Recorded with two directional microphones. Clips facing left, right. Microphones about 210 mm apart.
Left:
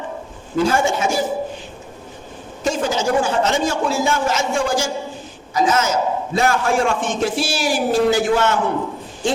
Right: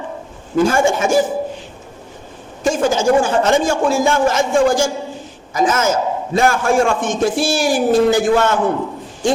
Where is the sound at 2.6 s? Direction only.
50° right (ahead or behind).